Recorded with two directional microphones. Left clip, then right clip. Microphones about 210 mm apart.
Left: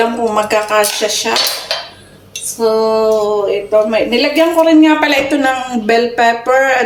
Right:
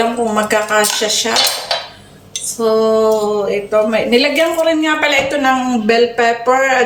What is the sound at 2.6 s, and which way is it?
Speech, 15° left (ahead or behind).